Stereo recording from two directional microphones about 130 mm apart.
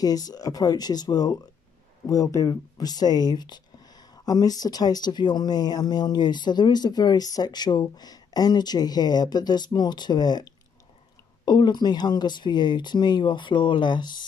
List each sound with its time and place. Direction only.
0.0 s speech: 30° left (ahead or behind)